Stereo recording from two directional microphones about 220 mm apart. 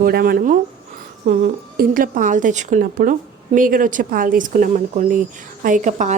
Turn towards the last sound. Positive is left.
turn(degrees=-35)  # may be behind; listen again after turning